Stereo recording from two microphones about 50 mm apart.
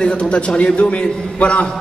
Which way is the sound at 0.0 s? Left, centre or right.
Left.